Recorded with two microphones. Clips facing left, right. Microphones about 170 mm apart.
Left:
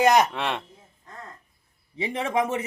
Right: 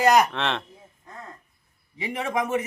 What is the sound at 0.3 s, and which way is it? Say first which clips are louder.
Speech: right 1 dB; 10° left (ahead or behind).